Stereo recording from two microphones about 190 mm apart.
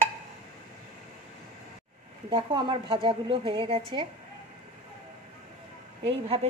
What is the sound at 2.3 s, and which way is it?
Speech, 25° right (ahead or behind).